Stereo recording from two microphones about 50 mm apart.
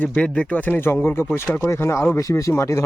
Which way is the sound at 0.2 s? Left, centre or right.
Left.